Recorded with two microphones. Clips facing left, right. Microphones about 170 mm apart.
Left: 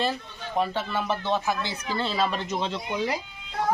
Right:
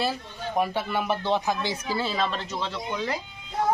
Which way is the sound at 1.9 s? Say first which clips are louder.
Left 2 dB; 5° right (ahead or behind).